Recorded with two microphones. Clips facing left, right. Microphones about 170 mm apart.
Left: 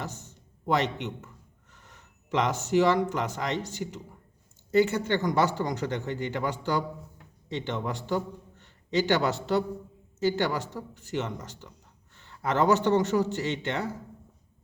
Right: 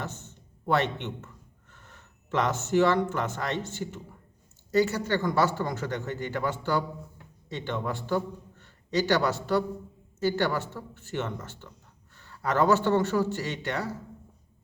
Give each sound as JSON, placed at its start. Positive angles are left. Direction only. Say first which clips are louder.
{"t": 0.0, "sound": "a man's voice", "louder": "even", "side_deg": 15}